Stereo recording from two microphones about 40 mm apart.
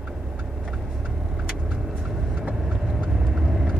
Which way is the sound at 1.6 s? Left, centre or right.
Centre.